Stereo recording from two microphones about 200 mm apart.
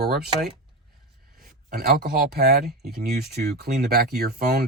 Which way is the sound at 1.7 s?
50° right (ahead or behind).